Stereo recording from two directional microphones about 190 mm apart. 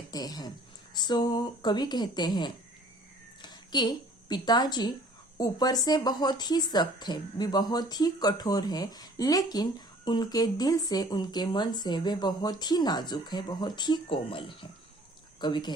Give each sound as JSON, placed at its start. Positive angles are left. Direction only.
{"t": 0.1, "sound": "speech", "side_deg": 20}
{"t": 3.4, "sound": "a sound", "side_deg": 25}
{"t": 5.4, "sound": "speech", "side_deg": 20}